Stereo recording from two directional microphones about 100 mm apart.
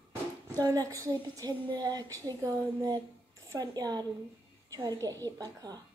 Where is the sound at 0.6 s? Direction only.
35° right (ahead or behind).